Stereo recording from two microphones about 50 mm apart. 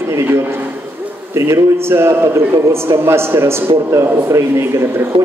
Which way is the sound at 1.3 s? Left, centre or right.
Right.